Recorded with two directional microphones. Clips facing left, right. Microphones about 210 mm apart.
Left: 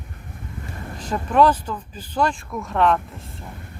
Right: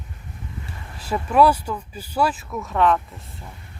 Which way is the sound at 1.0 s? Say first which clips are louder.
Even; 10° right (ahead or behind).